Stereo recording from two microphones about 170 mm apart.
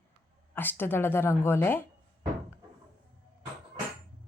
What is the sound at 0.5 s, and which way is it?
A woman's voice, 10° left (ahead or behind).